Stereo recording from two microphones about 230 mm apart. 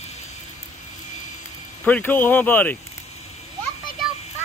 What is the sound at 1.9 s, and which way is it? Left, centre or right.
Speech, centre.